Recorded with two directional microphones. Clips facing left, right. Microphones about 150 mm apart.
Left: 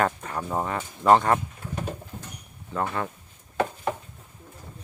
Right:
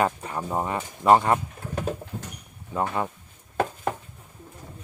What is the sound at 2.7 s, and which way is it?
Speech, 15° right (ahead or behind).